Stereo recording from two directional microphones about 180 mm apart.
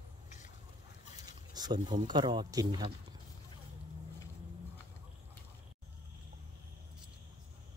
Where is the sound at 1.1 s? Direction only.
20° right (ahead or behind).